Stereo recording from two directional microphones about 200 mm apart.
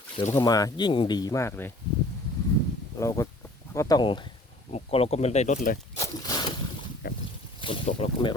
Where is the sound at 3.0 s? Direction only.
15° left (ahead or behind); by 5.7 s 40° left (ahead or behind).